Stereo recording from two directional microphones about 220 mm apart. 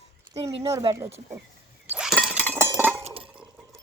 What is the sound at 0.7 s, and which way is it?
Speech, 15° right (ahead or behind).